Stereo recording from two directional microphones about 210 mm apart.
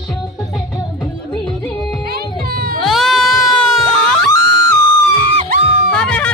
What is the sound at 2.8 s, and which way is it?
Cat, centre (ahead or behind).